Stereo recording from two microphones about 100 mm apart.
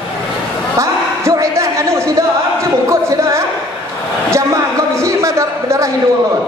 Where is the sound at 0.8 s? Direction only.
30° right (ahead or behind).